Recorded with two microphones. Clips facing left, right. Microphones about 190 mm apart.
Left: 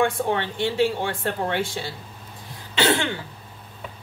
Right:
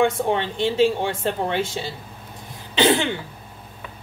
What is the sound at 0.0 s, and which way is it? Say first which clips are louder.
Speech: right 2 dB; 20° right (ahead or behind).